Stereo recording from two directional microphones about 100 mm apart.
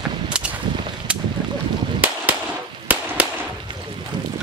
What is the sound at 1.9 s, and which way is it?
Firecracker, 15° right (ahead or behind).